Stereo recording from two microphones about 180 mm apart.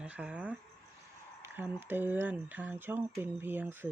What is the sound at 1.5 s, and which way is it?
Speech, 10° right (ahead or behind).